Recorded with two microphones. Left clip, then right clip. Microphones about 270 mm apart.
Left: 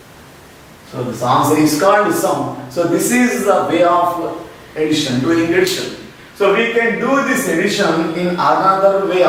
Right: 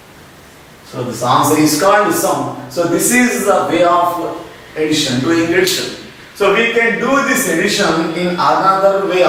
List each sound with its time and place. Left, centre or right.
0.9 s speech: left
4.8 s a man's voice: centre
5.1 s a man's voice: centre